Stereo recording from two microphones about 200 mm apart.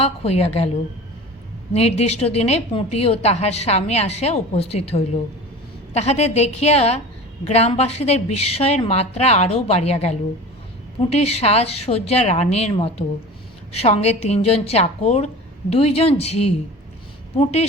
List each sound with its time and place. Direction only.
0.0 s a woman's voice: 30° left (ahead or behind)
1.7 s a woman's voice: 30° left (ahead or behind)